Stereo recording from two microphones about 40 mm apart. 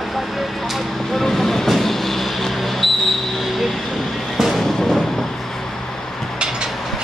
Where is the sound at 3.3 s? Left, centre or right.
Centre.